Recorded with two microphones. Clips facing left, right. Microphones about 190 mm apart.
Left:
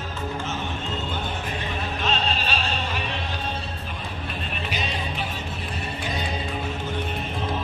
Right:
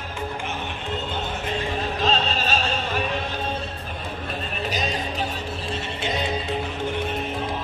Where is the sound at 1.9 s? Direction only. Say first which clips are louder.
Right 2 dB; 40° right (ahead or behind).